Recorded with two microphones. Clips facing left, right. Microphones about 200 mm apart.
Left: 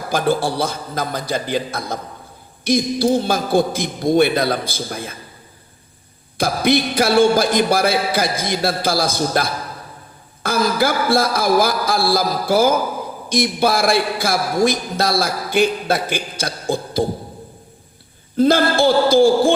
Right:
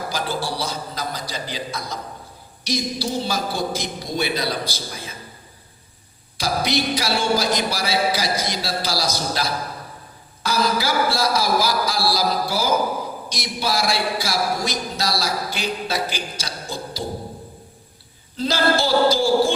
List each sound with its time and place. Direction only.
0.1 s a man's voice: 55° left (ahead or behind)
6.3 s a man's voice: 55° left (ahead or behind)
18.3 s a man's voice: 55° left (ahead or behind)